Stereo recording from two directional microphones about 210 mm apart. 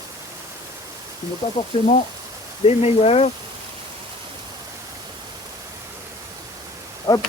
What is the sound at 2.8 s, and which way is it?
Speech, 30° left (ahead or behind).